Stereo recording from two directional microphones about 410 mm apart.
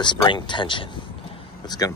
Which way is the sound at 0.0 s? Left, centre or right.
Centre.